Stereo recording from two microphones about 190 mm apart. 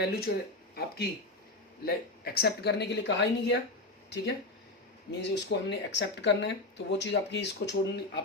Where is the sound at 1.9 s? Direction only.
55° left (ahead or behind).